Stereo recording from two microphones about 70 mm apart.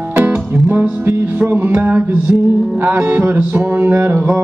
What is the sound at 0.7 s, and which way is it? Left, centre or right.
Music, right.